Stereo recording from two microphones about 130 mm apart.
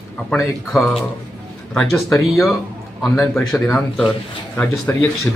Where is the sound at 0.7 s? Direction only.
Centre (ahead or behind).